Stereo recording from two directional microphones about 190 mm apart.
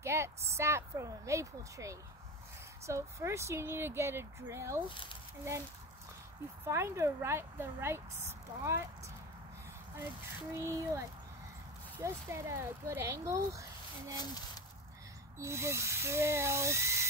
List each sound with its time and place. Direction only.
0.0 s speech: 15° right (ahead or behind)
4.8 s speech: 25° left (ahead or behind)
6.6 s speech: 15° right (ahead or behind)
10.5 s speech: 15° right (ahead or behind)
14.1 s speech: 20° left (ahead or behind)
15.3 s speech: 15° right (ahead or behind)